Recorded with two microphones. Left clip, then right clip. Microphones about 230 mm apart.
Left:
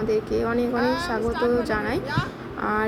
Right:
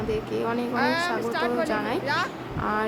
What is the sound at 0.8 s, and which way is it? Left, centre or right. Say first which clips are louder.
Speech: even; right.